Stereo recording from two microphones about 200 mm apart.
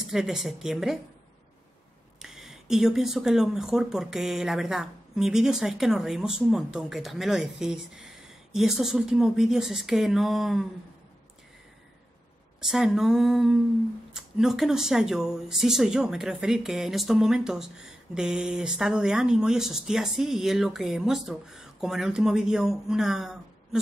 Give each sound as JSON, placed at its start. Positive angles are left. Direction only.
{"t": 0.0, "sound": "speech", "side_deg": 0}
{"t": 2.1, "sound": "speech", "side_deg": 0}
{"t": 12.5, "sound": "speech", "side_deg": 0}